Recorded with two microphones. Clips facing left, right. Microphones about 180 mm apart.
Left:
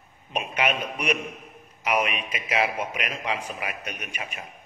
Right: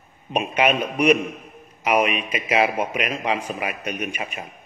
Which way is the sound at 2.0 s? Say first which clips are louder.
Right 6 dB; 5° right (ahead or behind).